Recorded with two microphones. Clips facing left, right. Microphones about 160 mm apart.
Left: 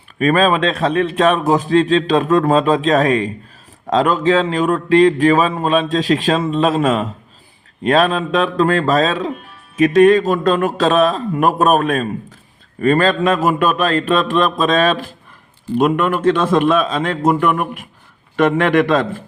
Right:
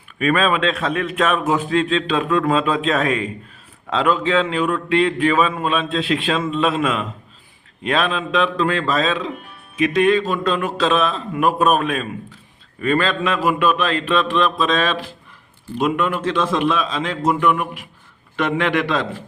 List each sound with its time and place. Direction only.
0.2 s a man's voice: 40° left (ahead or behind)